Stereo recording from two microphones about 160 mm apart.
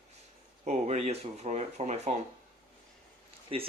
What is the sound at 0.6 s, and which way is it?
Speech, 45° right (ahead or behind).